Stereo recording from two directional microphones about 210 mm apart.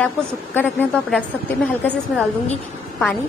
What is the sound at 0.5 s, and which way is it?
A woman's voice, 10° left (ahead or behind).